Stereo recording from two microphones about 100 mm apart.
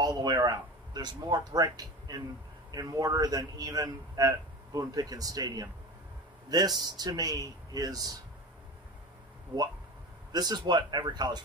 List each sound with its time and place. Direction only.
0.0 s speech: 45° right (ahead or behind)
10.3 s speech: 45° right (ahead or behind)